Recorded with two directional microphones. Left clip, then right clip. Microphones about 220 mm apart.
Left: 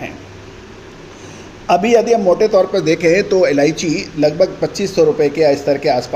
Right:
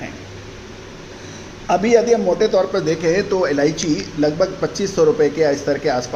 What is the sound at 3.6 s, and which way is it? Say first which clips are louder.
Speech: left 3 dB; 55° left (ahead or behind).